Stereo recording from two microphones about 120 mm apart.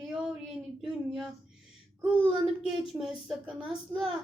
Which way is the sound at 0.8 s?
5° right (ahead or behind).